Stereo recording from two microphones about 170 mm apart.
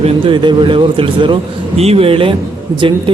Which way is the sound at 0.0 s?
30° right (ahead or behind).